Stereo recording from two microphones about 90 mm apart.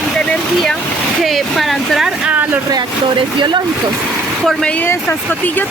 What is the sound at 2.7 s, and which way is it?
Speech, 60° right (ahead or behind).